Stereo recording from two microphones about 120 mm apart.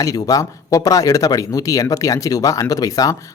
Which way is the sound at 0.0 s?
30° left (ahead or behind).